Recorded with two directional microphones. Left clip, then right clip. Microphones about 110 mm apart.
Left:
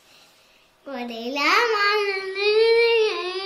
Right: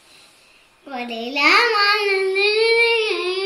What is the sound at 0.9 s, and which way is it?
Child singing, 30° left (ahead or behind).